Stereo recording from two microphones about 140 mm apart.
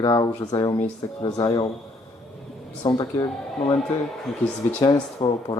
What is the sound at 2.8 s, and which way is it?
Speech, 30° left (ahead or behind).